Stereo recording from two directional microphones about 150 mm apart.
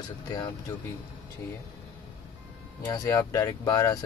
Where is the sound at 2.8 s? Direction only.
25° left (ahead or behind).